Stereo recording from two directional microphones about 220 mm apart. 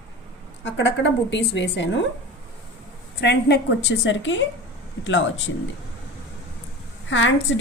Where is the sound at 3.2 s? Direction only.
50° left (ahead or behind).